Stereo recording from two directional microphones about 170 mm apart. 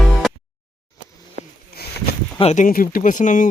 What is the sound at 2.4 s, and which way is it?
Speech, 40° left (ahead or behind).